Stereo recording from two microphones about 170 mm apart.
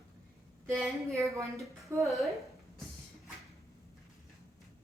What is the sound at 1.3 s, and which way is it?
Speech, 20° right (ahead or behind).